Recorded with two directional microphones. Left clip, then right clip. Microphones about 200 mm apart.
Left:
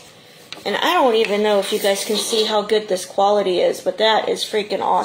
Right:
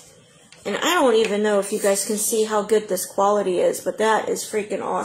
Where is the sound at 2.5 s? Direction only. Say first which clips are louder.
Left 2 dB; 40° left (ahead or behind).